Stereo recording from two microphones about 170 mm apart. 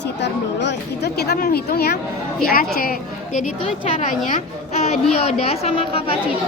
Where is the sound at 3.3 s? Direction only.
45° left (ahead or behind).